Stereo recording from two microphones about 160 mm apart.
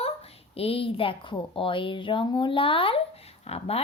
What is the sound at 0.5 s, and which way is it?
A woman's voice, 35° left (ahead or behind).